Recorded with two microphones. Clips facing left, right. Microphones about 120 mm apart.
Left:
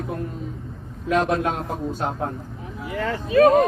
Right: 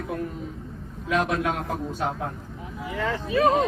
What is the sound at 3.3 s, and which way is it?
Speech, 55° left (ahead or behind).